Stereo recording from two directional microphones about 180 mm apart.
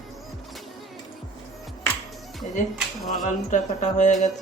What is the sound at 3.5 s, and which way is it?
Speech, 40° left (ahead or behind).